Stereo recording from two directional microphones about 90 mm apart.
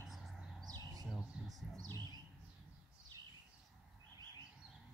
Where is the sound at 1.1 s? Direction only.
Centre (ahead or behind).